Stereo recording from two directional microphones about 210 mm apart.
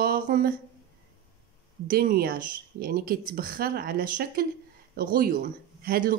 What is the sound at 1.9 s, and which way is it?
Speech, 45° right (ahead or behind).